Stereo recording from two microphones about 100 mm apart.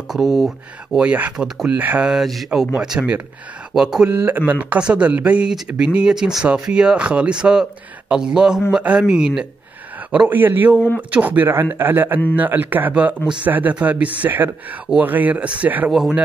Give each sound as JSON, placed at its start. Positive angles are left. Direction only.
{"t": 0.1, "sound": "speech", "side_deg": 0}
{"t": 0.9, "sound": "speech", "side_deg": -15}
{"t": 2.0, "sound": "speech", "side_deg": 0}
{"t": 4.1, "sound": "speech", "side_deg": -20}
{"t": 15.9, "sound": "speech", "side_deg": -5}